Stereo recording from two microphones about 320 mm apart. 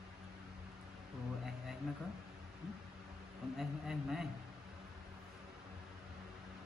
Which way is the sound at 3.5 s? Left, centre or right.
Centre.